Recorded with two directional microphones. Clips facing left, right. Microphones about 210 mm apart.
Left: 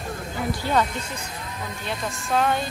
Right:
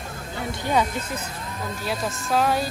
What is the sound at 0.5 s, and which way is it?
A woman's voice, 15° right (ahead or behind).